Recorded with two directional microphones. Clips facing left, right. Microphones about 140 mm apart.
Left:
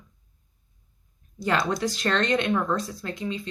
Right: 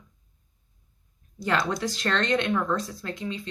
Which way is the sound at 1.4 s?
15° left (ahead or behind).